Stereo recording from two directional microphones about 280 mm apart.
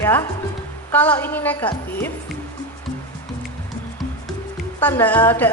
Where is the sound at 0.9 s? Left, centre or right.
Centre.